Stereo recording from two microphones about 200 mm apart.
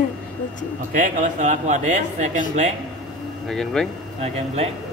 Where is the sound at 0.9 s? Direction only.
40° right (ahead or behind).